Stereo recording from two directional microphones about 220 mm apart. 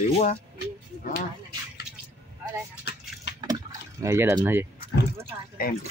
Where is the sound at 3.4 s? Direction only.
15° right (ahead or behind).